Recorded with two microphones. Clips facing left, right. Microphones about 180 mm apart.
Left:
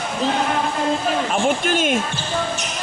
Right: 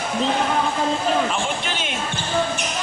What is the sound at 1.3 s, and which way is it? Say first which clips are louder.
Speech: left 6 dB; 50° left (ahead or behind).